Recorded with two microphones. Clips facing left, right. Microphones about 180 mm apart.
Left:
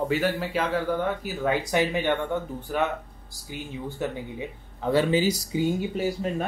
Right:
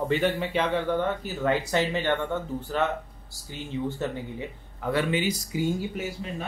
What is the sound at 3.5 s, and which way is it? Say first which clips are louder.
Speech: right 3 dB; 10° left (ahead or behind).